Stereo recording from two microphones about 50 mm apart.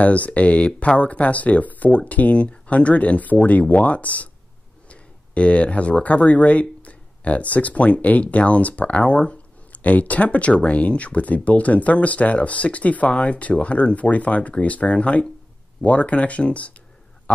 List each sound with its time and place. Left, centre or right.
0.0 s speech: left